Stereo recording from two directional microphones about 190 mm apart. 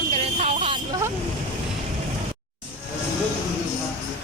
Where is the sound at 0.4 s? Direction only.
30° right (ahead or behind).